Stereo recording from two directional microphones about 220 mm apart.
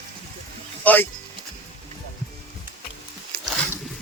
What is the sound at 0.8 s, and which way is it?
Speech, 5° left (ahead or behind).